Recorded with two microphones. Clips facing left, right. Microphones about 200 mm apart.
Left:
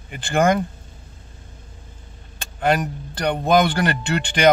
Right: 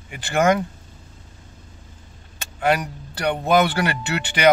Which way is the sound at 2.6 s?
5° right (ahead or behind).